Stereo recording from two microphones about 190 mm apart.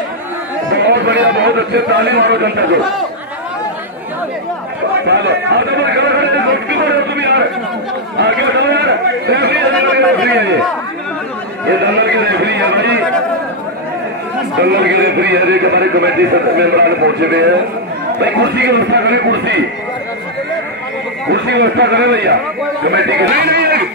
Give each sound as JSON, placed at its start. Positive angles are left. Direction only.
{"t": 0.7, "sound": "a man's voice", "side_deg": -60}
{"t": 5.0, "sound": "a man's voice", "side_deg": -65}
{"t": 11.6, "sound": "a man's voice", "side_deg": -65}
{"t": 14.6, "sound": "a man's voice", "side_deg": -60}
{"t": 21.3, "sound": "a man's voice", "side_deg": -65}